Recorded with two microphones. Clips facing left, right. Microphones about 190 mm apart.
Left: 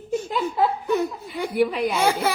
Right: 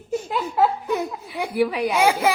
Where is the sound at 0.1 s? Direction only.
10° right (ahead or behind).